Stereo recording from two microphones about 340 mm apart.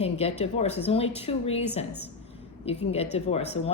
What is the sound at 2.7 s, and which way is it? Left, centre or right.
A woman's voice, centre.